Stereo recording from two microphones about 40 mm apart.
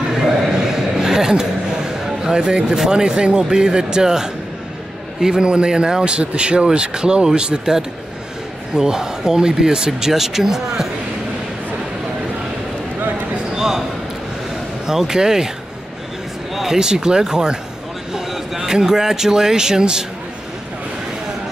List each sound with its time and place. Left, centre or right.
0.1 s a sound: centre
2.9 s speech: right
13.6 s basketball bounce: centre
14.9 s speech: centre
16.5 s speech: centre
18.3 s speech: centre